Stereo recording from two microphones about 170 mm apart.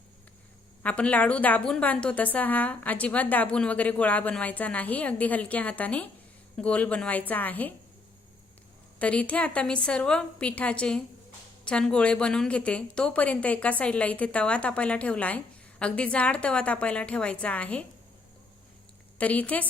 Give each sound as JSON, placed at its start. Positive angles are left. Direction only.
{"t": 0.8, "sound": "a woman's voice", "side_deg": 5}
{"t": 9.0, "sound": "a woman's voice", "side_deg": 10}
{"t": 19.2, "sound": "a woman's voice", "side_deg": 10}